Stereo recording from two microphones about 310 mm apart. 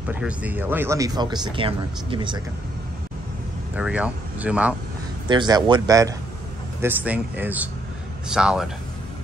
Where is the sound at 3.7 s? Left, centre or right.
Centre.